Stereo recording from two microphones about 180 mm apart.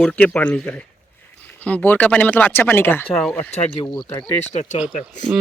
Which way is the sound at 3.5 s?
30° left (ahead or behind).